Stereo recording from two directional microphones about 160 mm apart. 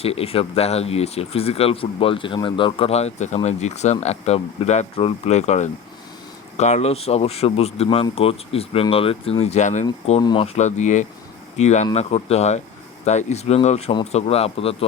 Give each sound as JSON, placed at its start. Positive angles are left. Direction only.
{"t": 0.0, "sound": "speech", "side_deg": 40}
{"t": 10.1, "sound": "speech", "side_deg": 30}